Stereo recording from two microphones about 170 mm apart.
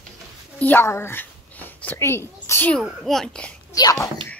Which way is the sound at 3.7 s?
20° left (ahead or behind).